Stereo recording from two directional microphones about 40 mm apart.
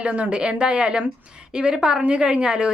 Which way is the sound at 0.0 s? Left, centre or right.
Right.